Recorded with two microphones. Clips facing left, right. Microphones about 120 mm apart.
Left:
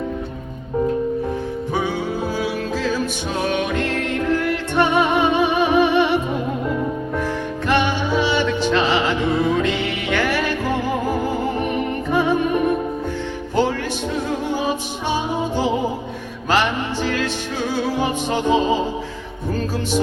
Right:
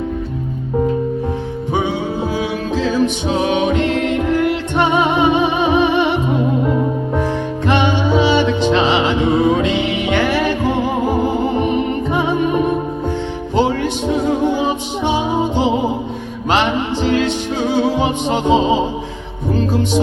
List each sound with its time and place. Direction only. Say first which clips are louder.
2.4 s music: right 4 dB; 20° right (ahead or behind)
7.7 s music: right 4 dB; 20° right (ahead or behind)
14.3 s music: right 5 dB; 20° right (ahead or behind)